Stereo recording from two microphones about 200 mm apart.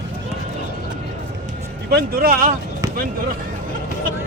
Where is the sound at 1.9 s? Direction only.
50° right (ahead or behind).